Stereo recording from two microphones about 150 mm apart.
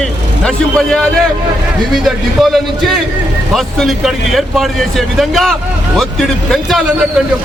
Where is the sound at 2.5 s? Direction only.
Centre (ahead or behind).